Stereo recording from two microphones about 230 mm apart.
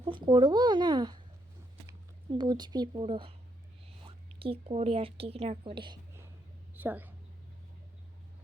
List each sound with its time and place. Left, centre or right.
0.0 s a woman's voice: right
6.7 s a woman's voice: centre